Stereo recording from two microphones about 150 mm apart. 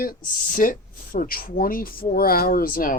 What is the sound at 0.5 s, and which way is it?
Speech, 65° left (ahead or behind).